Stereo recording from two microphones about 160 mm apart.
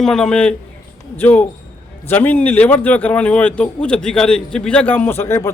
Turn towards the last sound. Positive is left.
turn(degrees=15)  # may be behind; listen again after turning